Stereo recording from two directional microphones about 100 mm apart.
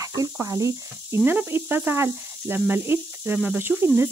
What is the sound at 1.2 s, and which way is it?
Speech, 20° right (ahead or behind).